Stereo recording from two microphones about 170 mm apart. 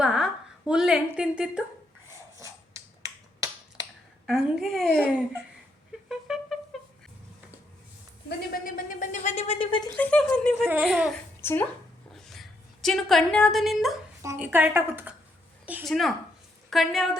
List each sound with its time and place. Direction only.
0.0 s a sound: 5° right (ahead or behind)
0.7 s a woman's voice: 5° right (ahead or behind)
2.4 s finger snapping: 20° right (ahead or behind)
4.3 s a woman's voice: 5° right (ahead or behind)
6.1 s a sound: 5° right (ahead or behind)
8.4 s speech: 55° left (ahead or behind); by 9.9 s 30° left (ahead or behind)
9.9 s a woman's voice: 10° left (ahead or behind)
11.3 s speech: 15° left (ahead or behind)
12.1 s a sound: centre (ahead or behind)
14.2 s speech: 15° right (ahead or behind)
15.8 s a woman's voice: centre (ahead or behind)